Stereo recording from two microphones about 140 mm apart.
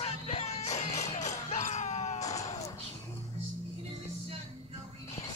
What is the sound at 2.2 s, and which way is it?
Music, 25° left (ahead or behind).